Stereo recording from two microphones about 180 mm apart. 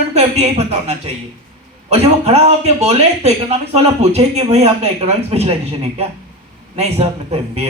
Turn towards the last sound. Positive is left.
turn(degrees=-35)  # may be behind; listen again after turning